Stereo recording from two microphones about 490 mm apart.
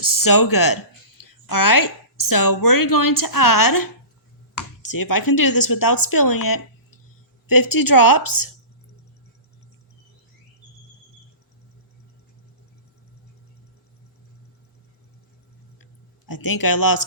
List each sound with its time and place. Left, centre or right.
0.0 s a woman's voice: left
4.9 s a woman's voice: left
15.8 s a sound: left